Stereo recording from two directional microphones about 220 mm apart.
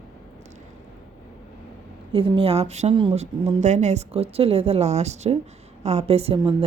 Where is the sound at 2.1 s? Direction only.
25° right (ahead or behind).